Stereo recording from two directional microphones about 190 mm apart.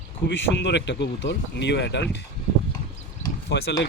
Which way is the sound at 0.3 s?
70° left (ahead or behind).